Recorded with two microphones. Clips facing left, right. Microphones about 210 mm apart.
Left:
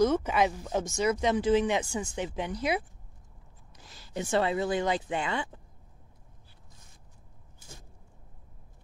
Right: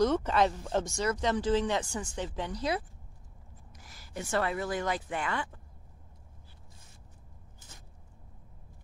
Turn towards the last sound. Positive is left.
turn(degrees=10)  # may be behind; listen again after turning